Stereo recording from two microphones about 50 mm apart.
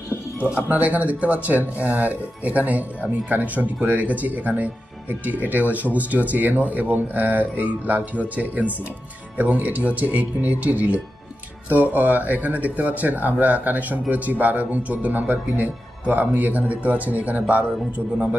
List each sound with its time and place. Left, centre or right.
0.7 s speech: right